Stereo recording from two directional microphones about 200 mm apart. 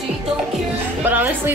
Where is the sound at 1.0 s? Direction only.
10° right (ahead or behind).